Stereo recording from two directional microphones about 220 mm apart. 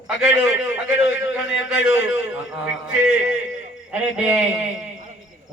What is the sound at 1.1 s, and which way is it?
A man's voice, 60° left (ahead or behind).